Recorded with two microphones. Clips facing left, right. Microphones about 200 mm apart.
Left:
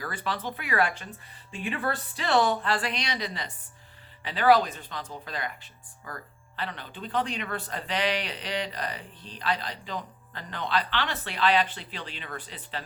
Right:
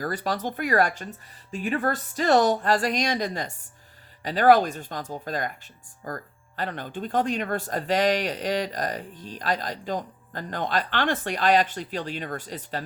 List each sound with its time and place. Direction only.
0.0 s speech: 40° right (ahead or behind)